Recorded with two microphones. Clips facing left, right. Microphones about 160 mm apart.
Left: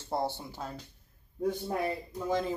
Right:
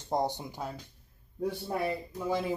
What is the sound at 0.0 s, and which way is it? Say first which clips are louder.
Speech: right 2 dB; 15° right (ahead or behind).